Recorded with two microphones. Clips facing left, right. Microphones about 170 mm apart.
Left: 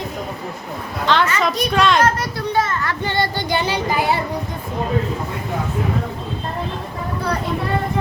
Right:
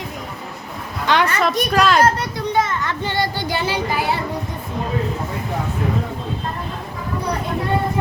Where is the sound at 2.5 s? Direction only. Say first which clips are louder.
Even; 20° right (ahead or behind).